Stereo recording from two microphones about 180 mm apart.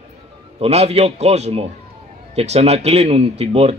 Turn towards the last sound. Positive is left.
turn(degrees=-35)  # may be behind; listen again after turning